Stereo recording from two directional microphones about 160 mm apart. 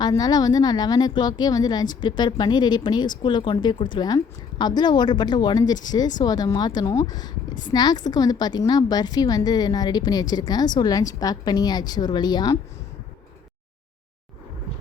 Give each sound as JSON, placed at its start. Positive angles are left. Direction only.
{"t": 0.0, "sound": "a woman's voice", "side_deg": 25}